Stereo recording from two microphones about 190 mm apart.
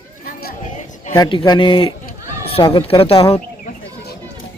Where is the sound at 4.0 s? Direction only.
60° left (ahead or behind).